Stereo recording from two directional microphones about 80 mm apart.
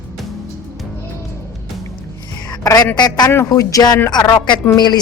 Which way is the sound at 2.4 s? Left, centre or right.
Left.